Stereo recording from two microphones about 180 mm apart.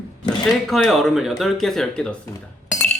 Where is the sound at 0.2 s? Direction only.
5° left (ahead or behind).